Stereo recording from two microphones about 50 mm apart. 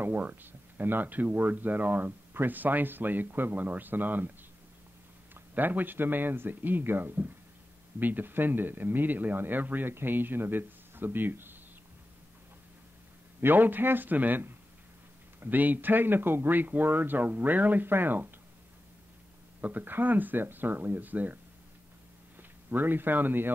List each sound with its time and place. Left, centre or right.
0.2 s speech: right
5.3 s speech: right
13.4 s speech: right
19.6 s speech: right
22.4 s speech: right